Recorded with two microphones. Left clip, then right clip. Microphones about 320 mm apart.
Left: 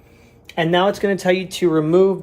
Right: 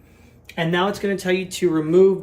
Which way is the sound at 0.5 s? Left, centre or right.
Centre.